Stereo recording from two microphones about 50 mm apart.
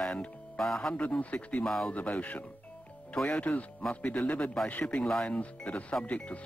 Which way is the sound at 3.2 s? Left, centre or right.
Centre.